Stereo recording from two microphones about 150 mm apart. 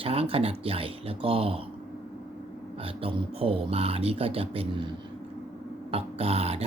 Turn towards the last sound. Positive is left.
turn(degrees=-40)  # may be behind; listen again after turning